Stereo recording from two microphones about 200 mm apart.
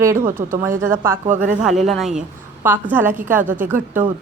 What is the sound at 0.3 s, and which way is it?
Speech, 40° right (ahead or behind).